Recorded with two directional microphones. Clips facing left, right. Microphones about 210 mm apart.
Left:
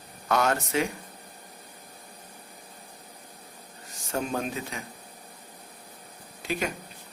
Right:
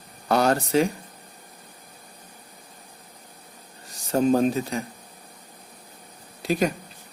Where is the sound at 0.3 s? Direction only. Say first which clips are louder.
Right 5 dB; 35° right (ahead or behind).